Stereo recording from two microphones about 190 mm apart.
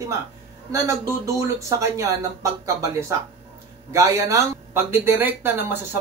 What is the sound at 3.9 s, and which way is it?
Speech, 15° right (ahead or behind).